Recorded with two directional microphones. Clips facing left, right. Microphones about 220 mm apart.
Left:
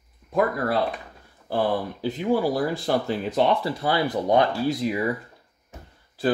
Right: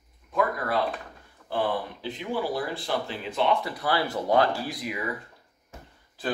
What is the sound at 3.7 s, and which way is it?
Speech, 25° left (ahead or behind).